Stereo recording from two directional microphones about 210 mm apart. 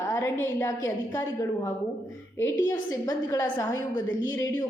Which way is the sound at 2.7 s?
15° left (ahead or behind).